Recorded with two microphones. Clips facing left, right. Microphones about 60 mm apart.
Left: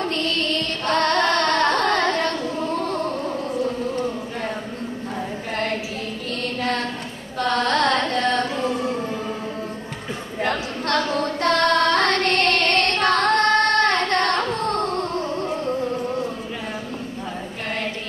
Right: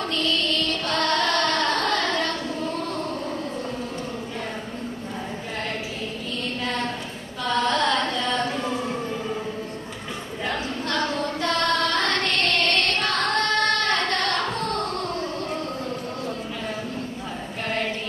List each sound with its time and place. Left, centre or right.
0.1 s carnatic music: left
6.4 s a sound: left
7.3 s carnatic music: left
10.4 s child singing: left